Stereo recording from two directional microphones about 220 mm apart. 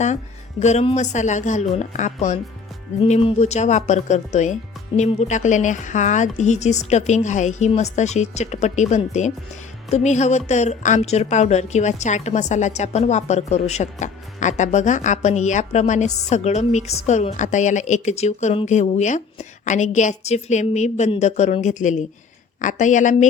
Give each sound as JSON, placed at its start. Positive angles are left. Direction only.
{"t": 0.6, "sound": "a woman's voice", "side_deg": 30}